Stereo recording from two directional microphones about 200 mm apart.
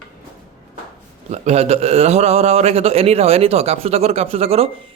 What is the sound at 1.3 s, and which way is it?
Speech, 35° right (ahead or behind).